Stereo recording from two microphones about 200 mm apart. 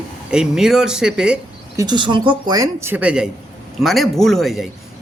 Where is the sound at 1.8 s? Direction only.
20° right (ahead or behind); by 4.7 s centre (ahead or behind).